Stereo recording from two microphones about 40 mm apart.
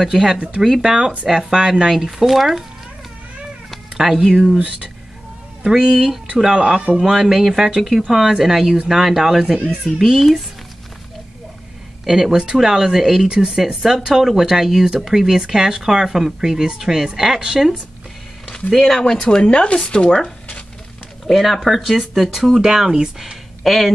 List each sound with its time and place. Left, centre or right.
0.0 s speech: centre
3.9 s speech: centre
5.7 s speech: centre
6.5 s speech: right
7.0 s speech: centre
12.0 s speech: centre
18.7 s speech: centre
19.2 s speech: left
21.3 s speech: centre
23.6 s speech: centre